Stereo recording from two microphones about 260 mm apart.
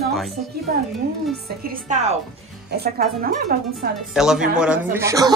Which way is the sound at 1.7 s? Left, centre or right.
Right.